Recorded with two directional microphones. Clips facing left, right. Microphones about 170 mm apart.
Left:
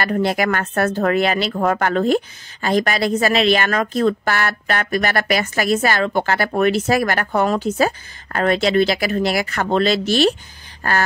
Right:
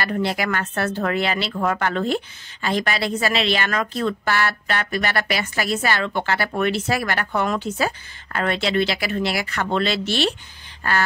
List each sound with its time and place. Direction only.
0.0 s speech: 45° left (ahead or behind)